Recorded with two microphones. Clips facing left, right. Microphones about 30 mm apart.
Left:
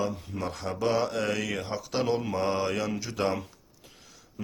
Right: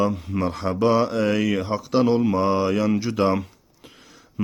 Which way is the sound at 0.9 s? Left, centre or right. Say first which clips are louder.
Right 6 dB; centre.